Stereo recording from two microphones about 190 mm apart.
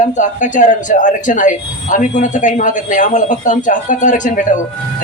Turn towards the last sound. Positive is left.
turn(degrees=40)  # may be behind; listen again after turning